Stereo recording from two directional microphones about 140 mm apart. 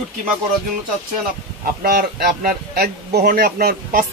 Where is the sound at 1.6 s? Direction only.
90° right.